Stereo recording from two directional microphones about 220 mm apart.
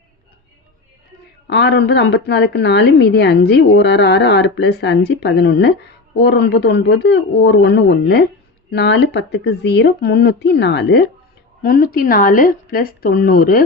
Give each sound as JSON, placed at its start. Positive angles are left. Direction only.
{"t": 1.5, "sound": "a woman's voice", "side_deg": 50}